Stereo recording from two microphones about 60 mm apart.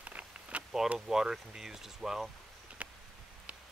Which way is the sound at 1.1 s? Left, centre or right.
Centre.